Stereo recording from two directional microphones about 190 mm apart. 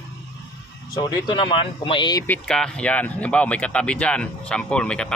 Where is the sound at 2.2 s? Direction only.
5° left (ahead or behind).